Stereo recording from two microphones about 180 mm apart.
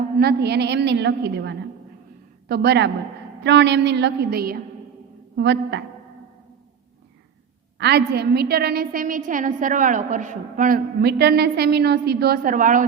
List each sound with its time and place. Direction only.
0.2 s a woman's voice: 65° right (ahead or behind)
5.4 s a woman's voice: 75° right (ahead or behind)
7.8 s a woman's voice: 65° right (ahead or behind); by 10.8 s 45° right (ahead or behind)
11.0 s a woman's voice: 65° right (ahead or behind); by 12.8 s 45° right (ahead or behind)